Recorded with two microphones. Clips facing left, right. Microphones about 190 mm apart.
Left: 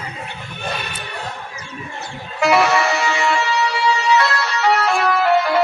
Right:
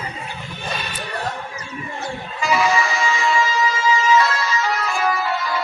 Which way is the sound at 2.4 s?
70° left (ahead or behind).